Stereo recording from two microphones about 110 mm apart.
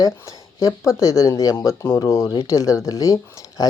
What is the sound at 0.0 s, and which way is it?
Speech, 30° left (ahead or behind).